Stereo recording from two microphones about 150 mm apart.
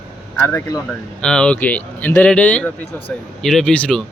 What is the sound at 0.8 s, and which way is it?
A man's voice, 5° left (ahead or behind).